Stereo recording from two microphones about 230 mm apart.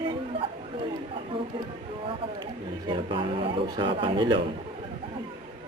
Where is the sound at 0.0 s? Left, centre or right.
Right.